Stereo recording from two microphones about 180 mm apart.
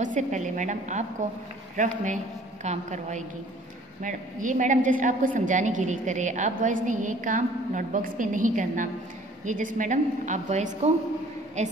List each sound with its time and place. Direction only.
0.0 s a woman's voice: 45° right (ahead or behind)